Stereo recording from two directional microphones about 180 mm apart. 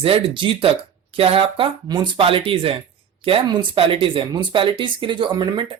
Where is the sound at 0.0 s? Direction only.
30° right (ahead or behind).